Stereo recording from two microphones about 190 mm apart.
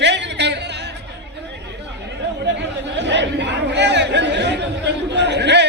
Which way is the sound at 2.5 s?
65° right (ahead or behind).